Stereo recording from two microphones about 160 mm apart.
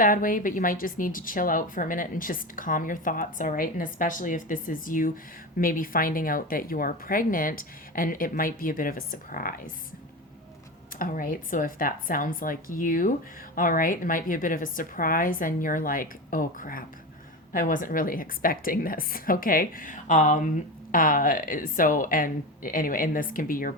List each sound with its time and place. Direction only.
0.0 s speech: 60° left (ahead or behind)
10.9 s speech: 55° left (ahead or behind)